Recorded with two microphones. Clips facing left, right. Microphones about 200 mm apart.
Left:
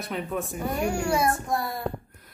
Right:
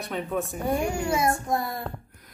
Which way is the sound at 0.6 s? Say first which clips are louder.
Even; 25° right (ahead or behind).